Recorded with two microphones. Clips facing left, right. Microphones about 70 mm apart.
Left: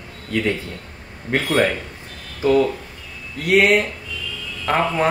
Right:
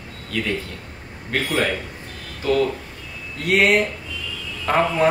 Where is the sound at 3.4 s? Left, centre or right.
Centre.